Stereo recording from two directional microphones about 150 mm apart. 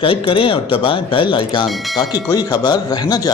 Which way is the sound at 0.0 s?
35° left (ahead or behind).